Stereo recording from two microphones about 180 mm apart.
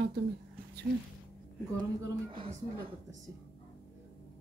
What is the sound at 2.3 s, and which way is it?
Speech, 30° right (ahead or behind).